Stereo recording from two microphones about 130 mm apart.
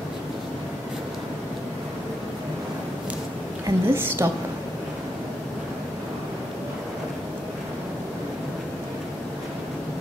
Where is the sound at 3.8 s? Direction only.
20° right (ahead or behind).